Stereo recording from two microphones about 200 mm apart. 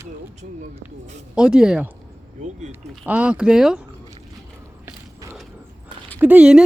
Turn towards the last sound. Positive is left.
turn(degrees=-5)  # may be behind; listen again after turning